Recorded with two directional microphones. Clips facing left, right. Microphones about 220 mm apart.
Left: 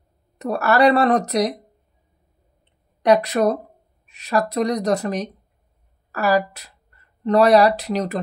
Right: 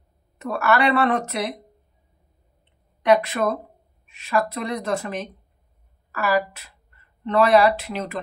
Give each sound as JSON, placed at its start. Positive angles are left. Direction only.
{"t": 0.4, "sound": "speech", "side_deg": 35}
{"t": 3.0, "sound": "speech", "side_deg": 35}